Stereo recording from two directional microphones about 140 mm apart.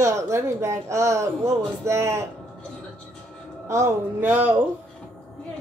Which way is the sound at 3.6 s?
20° right (ahead or behind).